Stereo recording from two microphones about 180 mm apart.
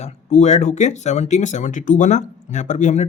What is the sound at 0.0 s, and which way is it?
Speech, 40° left (ahead or behind).